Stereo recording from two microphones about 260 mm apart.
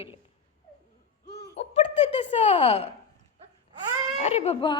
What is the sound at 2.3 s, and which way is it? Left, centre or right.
Speech, left.